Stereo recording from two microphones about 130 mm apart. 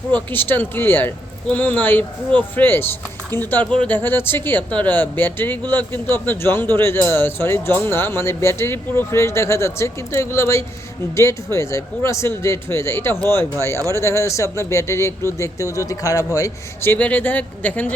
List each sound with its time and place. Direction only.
0.1 s speech: 15° left (ahead or behind)